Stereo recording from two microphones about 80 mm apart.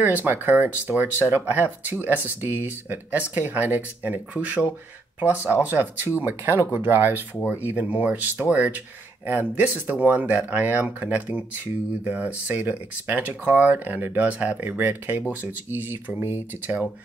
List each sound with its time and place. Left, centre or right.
0.0 s speech: right